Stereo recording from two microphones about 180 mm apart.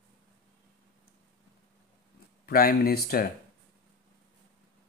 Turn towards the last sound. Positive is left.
turn(degrees=55)  # may be behind; listen again after turning